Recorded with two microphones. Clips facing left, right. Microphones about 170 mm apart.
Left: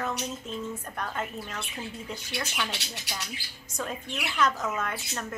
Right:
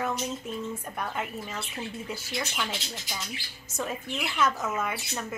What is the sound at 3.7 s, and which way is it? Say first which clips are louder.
A woman's voice: right 2 dB; 5° right (ahead or behind).